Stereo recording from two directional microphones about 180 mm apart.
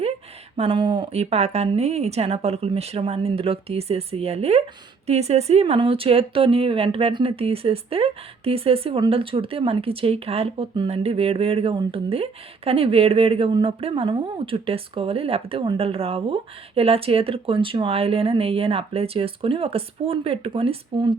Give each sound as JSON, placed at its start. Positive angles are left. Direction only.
{"t": 0.5, "sound": "speech", "side_deg": -30}